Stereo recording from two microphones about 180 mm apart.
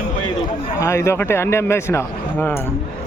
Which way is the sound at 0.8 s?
15° left (ahead or behind).